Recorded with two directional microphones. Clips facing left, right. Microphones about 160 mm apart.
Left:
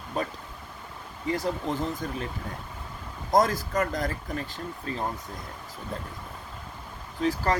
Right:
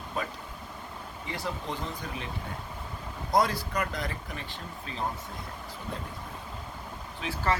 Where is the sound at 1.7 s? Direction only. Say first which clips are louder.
Left 6 dB; centre (ahead or behind).